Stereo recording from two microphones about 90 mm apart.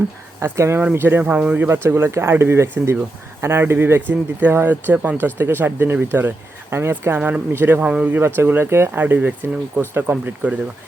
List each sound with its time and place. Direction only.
0.3 s speech: 30° right (ahead or behind)
1.2 s speech: 15° right (ahead or behind)
7.2 s speech: 15° right (ahead or behind)
7.5 s speech: 25° right (ahead or behind)
7.8 s speech: 15° right (ahead or behind)